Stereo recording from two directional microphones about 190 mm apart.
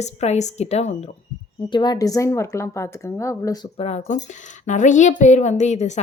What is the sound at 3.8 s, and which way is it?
Speech, 35° left (ahead or behind).